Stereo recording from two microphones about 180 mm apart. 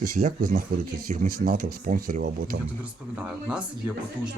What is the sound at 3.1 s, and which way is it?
Speech, 5° right (ahead or behind).